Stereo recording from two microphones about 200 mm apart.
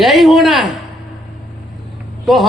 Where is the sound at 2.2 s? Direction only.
Centre (ahead or behind).